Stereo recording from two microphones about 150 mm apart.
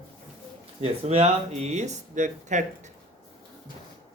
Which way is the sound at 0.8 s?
45° right (ahead or behind).